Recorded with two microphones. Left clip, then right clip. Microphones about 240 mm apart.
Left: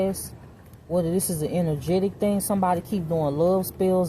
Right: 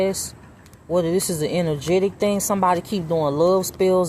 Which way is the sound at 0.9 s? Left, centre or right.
Right.